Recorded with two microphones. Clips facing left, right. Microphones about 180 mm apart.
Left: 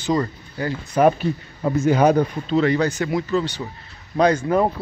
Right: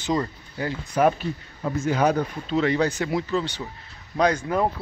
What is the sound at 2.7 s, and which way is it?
Speech, 30° right (ahead or behind).